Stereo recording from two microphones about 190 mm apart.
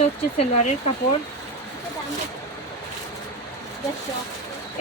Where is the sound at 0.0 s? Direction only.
35° left (ahead or behind).